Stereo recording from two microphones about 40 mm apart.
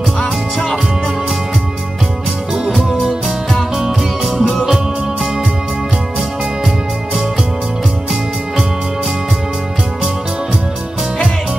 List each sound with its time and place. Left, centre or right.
2.5 s music: centre